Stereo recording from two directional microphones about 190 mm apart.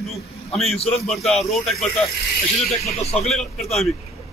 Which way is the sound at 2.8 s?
35° left (ahead or behind).